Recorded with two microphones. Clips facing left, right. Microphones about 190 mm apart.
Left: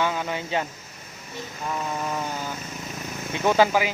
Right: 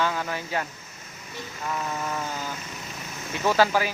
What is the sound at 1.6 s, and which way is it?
Speech, 15° left (ahead or behind).